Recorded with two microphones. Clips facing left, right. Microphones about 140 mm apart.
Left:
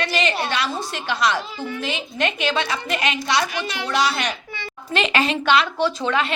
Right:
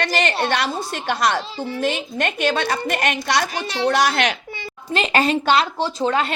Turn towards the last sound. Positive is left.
turn(degrees=-35)  # may be behind; listen again after turning